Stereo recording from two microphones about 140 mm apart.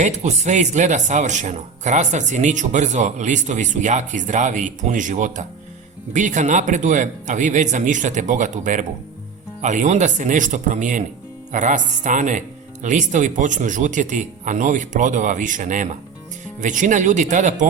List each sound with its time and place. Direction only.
0.0 s speech: 55° right (ahead or behind)